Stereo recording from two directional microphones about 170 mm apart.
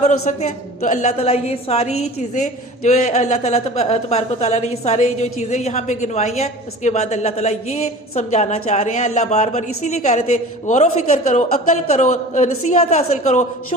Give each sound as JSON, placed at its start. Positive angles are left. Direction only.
{"t": 0.0, "sound": "a woman's voice", "side_deg": 40}